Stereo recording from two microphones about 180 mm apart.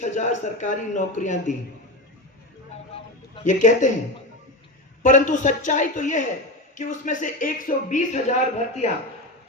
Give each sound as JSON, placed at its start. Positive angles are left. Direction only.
{"t": 0.0, "sound": "speech", "side_deg": 40}
{"t": 3.4, "sound": "speech", "side_deg": 45}
{"t": 5.0, "sound": "speech", "side_deg": 45}